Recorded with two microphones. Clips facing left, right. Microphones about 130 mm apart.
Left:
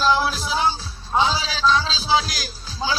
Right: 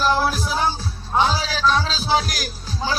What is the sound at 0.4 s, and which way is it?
Music, 90° left.